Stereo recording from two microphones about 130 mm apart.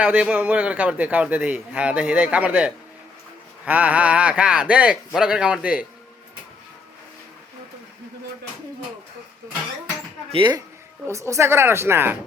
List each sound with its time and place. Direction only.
0.0 s a man's voice: 10° right (ahead or behind)
11.0 s speech: 25° right (ahead or behind)